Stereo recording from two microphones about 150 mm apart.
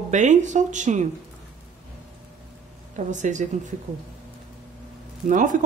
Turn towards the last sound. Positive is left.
turn(degrees=-60)  # may be behind; listen again after turning